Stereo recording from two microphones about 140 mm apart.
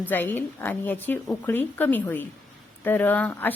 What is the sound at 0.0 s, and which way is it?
A woman's voice, 15° left (ahead or behind).